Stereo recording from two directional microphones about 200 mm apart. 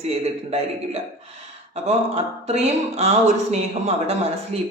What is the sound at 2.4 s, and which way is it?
Speech, 30° right (ahead or behind).